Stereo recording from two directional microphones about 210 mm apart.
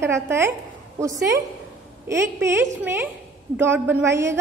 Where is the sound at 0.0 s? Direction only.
10° right (ahead or behind).